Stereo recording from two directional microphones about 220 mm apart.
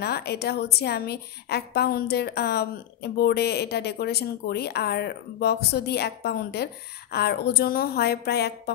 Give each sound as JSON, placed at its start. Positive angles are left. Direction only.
{"t": 0.0, "sound": "a woman's voice", "side_deg": 45}